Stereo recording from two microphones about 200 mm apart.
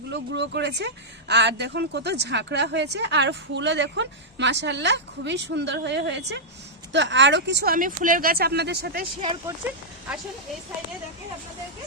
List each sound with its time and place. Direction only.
0.1 s speech: 60° right (ahead or behind)